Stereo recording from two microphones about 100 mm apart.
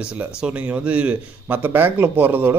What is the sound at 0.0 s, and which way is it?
A man's voice, 10° right (ahead or behind).